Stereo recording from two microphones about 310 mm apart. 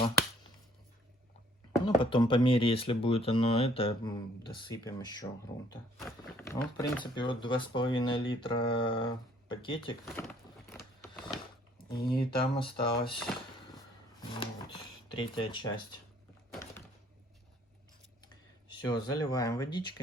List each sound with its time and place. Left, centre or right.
2.0 s speech: centre
10.1 s speech: centre
10.8 s a sound: centre
11.8 s speech: left
12.5 s speech: centre
13.1 s speech: centre
14.3 s speech: centre
18.9 s speech: centre